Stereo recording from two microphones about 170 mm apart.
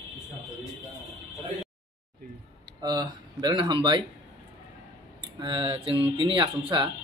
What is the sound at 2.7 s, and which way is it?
Speech, 25° right (ahead or behind).